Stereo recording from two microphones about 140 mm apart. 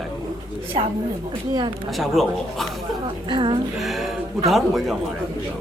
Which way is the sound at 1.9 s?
Centre (ahead or behind).